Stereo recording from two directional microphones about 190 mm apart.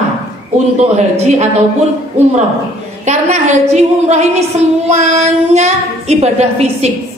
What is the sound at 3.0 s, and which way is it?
A woman's voice, 35° right (ahead or behind).